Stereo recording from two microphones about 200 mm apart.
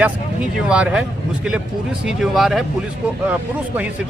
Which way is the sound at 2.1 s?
Centre (ahead or behind).